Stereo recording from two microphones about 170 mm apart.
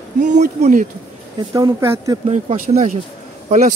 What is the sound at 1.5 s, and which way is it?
Speech, 20° right (ahead or behind).